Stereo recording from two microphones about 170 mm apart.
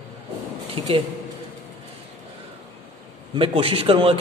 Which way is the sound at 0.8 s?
30° right (ahead or behind).